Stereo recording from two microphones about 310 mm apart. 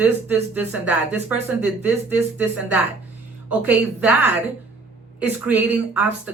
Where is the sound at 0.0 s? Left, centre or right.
Centre.